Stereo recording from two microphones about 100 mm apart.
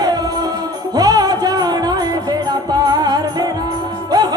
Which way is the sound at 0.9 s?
40° right (ahead or behind).